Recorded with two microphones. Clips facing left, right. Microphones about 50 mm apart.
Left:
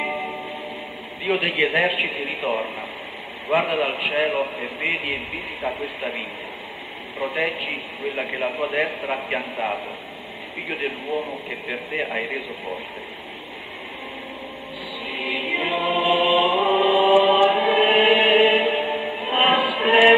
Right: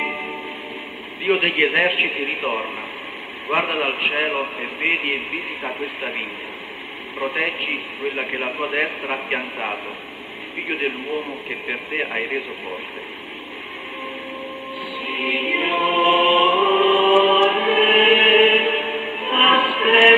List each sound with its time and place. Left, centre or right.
0.0 s music: right
1.2 s a man's voice: right
7.2 s a man's voice: right
15.0 s music: right